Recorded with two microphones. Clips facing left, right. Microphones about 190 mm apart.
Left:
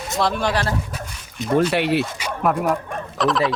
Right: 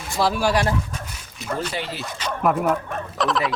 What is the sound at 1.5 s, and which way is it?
Speech, 65° left (ahead or behind).